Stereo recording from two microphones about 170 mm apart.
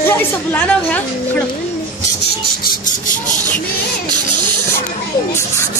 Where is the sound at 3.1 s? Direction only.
45° left (ahead or behind).